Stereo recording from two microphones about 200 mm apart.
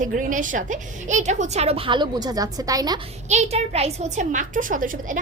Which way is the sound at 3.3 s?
35° right (ahead or behind).